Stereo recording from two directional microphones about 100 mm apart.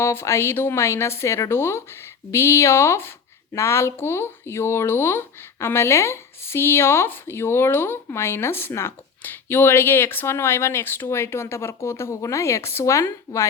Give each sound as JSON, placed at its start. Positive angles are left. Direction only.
{"t": 0.0, "sound": "speech", "side_deg": 25}